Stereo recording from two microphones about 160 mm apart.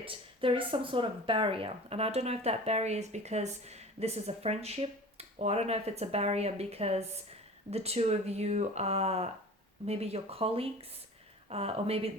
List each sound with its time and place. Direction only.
0.0 s speech: 35° right (ahead or behind)